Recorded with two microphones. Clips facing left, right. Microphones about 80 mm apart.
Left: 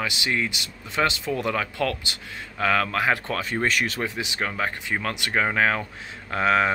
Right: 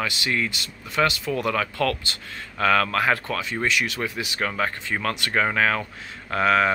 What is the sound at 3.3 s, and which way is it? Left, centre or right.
Speech, left.